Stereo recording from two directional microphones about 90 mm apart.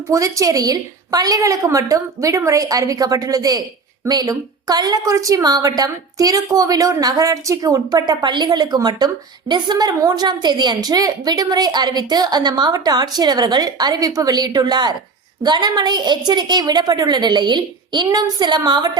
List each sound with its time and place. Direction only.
0.1 s a woman's voice: 40° right (ahead or behind)